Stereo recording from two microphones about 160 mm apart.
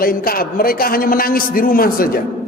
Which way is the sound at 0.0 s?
65° left (ahead or behind).